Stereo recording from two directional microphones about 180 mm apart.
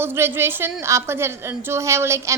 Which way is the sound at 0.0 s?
15° right (ahead or behind).